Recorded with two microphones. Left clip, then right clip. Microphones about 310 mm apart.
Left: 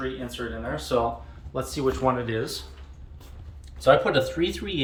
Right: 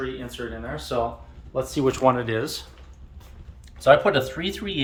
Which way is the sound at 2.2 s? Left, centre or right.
Centre.